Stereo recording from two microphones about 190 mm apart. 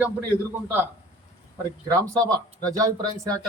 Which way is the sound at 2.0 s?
20° right (ahead or behind).